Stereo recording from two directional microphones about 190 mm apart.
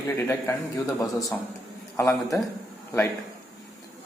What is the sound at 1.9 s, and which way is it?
Speech, 15° left (ahead or behind).